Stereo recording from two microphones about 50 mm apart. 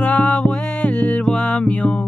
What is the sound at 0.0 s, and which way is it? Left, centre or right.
Music, left.